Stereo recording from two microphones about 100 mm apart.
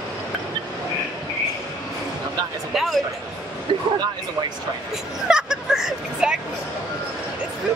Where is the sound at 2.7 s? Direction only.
Centre (ahead or behind).